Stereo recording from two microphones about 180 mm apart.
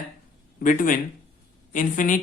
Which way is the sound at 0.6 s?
45° left (ahead or behind).